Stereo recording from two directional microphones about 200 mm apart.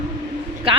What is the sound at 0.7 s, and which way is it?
Speech, 25° right (ahead or behind).